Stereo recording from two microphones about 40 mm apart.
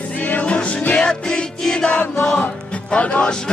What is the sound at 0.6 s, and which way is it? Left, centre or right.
Music, left.